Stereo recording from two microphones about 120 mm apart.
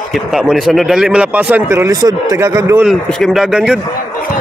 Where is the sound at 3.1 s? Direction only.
Centre (ahead or behind).